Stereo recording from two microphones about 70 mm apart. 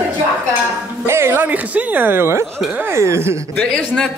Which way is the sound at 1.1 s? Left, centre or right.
Right.